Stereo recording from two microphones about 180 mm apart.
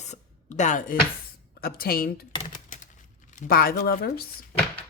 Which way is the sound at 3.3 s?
50° left (ahead or behind).